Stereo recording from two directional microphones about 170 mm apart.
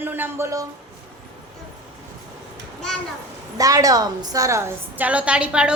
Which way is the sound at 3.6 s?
20° right (ahead or behind).